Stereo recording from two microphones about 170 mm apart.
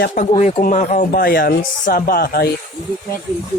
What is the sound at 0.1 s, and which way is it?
Speech, 45° left (ahead or behind).